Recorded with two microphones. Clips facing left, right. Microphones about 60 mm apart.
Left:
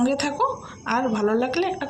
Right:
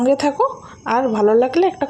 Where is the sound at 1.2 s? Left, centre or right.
Right.